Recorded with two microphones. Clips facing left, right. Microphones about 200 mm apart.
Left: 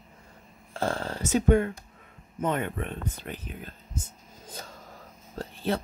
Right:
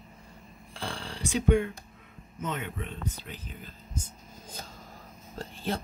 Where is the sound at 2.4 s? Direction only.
50° left (ahead or behind).